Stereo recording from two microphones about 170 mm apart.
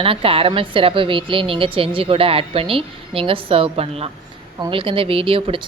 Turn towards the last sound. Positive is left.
turn(degrees=-35)  # may be behind; listen again after turning